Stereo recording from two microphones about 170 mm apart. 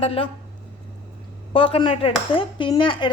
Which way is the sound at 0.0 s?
35° left (ahead or behind).